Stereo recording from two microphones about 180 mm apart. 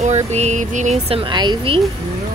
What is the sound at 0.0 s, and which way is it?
Speech, 40° right (ahead or behind).